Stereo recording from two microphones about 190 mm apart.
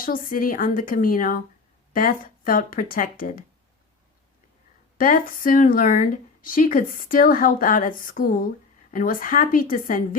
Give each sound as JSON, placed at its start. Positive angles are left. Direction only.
{"t": 0.0, "sound": "speech", "side_deg": 50}
{"t": 4.9, "sound": "speech", "side_deg": 45}